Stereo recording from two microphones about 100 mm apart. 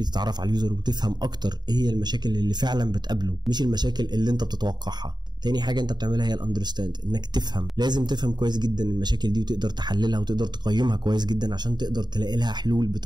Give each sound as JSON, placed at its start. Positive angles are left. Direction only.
{"t": 0.0, "sound": "speech", "side_deg": -45}